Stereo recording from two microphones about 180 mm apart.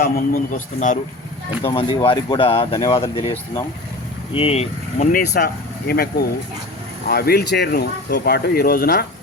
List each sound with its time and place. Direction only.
0.0 s a man's voice: 50° left (ahead or behind)
1.6 s speech: 25° left (ahead or behind)
4.4 s speech: 35° left (ahead or behind)
5.1 s speech: 65° left (ahead or behind)